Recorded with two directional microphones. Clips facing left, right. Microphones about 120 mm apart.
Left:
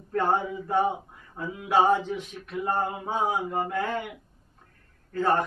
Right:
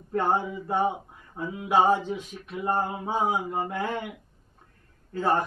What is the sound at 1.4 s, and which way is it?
Speech, 10° right (ahead or behind).